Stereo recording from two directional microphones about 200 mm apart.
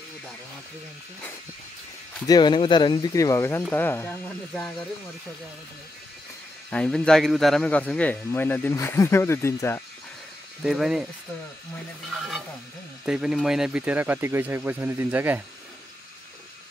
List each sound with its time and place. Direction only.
2.2 s speech: 20° left (ahead or behind)
6.7 s speech: 5° left (ahead or behind)
10.6 s speech: centre (ahead or behind)
12.1 s speech: centre (ahead or behind)